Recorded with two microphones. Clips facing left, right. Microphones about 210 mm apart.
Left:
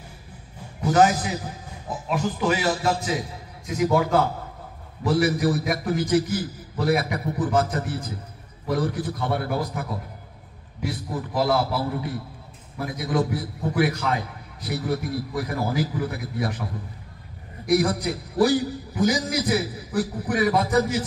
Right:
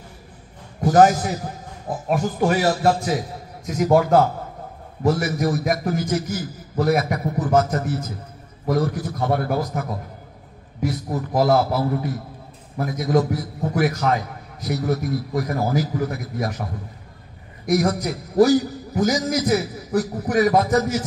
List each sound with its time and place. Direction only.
0.7 s a man's voice: 45° right (ahead or behind)
17.6 s a man's voice: 45° right (ahead or behind)